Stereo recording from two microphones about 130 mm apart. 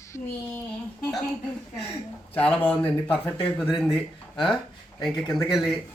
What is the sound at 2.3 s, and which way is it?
Speech, 10° left (ahead or behind).